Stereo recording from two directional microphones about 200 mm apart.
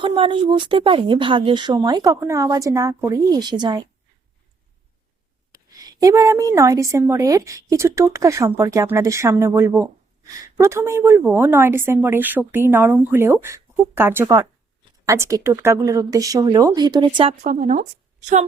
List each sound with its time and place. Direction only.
0.0 s speech: 25° right (ahead or behind)
5.5 s a woman's voice: 20° right (ahead or behind)
17.4 s speech: 35° right (ahead or behind)